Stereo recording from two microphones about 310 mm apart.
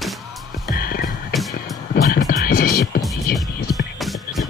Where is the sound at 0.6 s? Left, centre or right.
Left.